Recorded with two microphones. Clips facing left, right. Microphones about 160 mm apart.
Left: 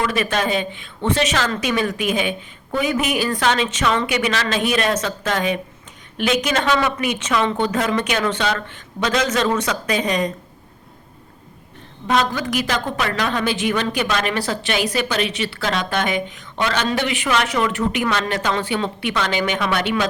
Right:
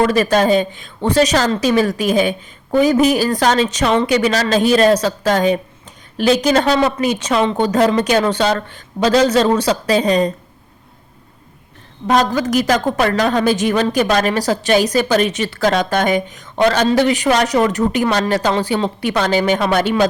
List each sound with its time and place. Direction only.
0.0 s a woman's voice: 40° right (ahead or behind)
12.0 s a woman's voice: 40° right (ahead or behind)